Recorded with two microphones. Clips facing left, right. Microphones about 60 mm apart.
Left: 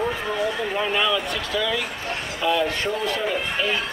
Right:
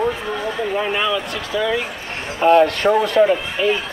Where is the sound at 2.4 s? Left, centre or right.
Right.